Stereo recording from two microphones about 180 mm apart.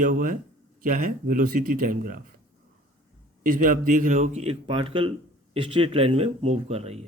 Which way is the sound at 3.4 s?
50° right (ahead or behind).